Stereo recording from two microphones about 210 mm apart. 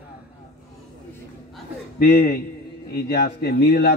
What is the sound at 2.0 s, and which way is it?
A man's voice, 45° left (ahead or behind).